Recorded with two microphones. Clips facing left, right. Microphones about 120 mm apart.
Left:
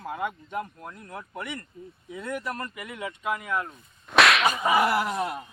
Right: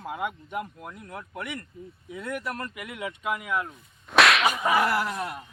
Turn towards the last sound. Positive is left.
turn(degrees=20)  # may be behind; listen again after turning